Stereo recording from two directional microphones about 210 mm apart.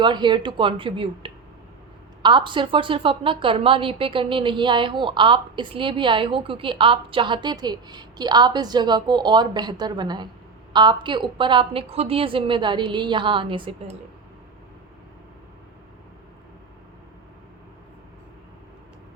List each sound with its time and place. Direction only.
0.0 s a woman's voice: 20° right (ahead or behind)